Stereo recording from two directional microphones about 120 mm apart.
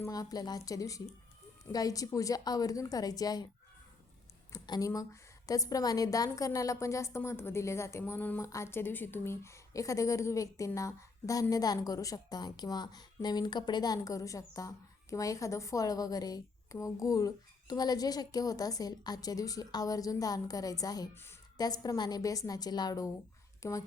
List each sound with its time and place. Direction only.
0.1 s a woman's voice: 30° left (ahead or behind)
4.5 s a woman's voice: 35° left (ahead or behind)